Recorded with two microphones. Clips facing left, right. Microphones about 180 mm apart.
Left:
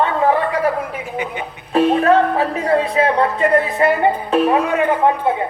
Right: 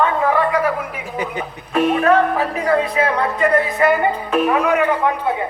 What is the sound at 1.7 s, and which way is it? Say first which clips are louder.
Speech: left 2 dB; 30° left (ahead or behind).